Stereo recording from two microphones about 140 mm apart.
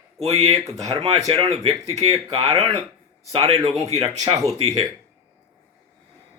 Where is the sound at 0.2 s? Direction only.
45° right (ahead or behind).